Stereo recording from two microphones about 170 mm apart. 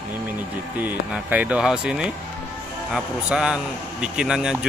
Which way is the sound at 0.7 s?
10° right (ahead or behind).